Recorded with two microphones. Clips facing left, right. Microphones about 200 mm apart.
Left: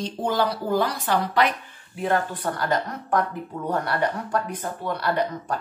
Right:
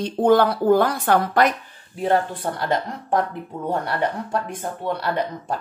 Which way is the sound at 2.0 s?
30° right (ahead or behind).